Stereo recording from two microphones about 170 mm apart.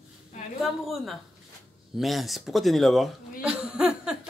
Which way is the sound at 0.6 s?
Centre (ahead or behind).